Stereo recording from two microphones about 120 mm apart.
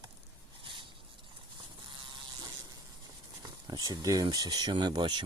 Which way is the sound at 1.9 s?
45° right (ahead or behind).